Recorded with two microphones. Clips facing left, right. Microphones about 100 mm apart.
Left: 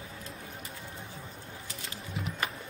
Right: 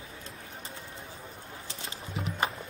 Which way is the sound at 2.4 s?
25° right (ahead or behind).